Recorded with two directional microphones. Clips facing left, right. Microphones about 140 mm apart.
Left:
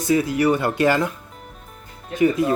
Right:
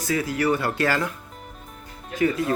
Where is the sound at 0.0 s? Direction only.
20° left (ahead or behind).